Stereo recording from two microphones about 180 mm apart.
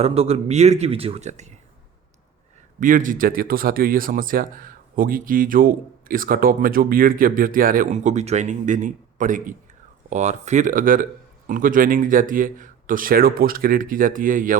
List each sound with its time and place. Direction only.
0.0 s speech: 35° right (ahead or behind)
2.8 s speech: 50° right (ahead or behind)